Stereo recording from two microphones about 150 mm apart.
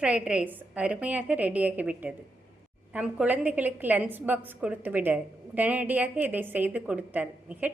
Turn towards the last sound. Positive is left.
turn(degrees=-10)  # may be behind; listen again after turning